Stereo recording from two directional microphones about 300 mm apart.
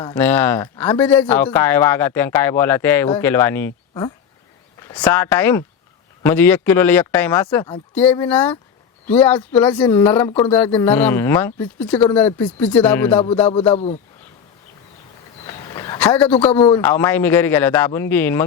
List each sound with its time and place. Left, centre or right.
0.1 s speech: centre
4.8 s speech: centre
13.5 s a man's voice: centre
15.4 s a sound: centre
16.7 s speech: centre